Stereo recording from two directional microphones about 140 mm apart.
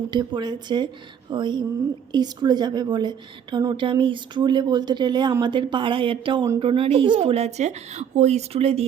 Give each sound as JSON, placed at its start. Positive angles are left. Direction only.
{"t": 0.1, "sound": "a woman's voice", "side_deg": -35}